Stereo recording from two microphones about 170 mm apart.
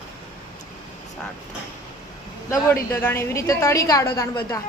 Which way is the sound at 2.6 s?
15° left (ahead or behind).